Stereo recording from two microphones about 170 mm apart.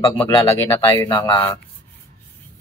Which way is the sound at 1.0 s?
25° left (ahead or behind).